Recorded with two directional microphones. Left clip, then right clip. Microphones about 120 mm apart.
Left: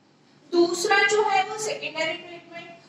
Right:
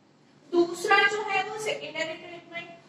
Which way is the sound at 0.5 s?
20° left (ahead or behind).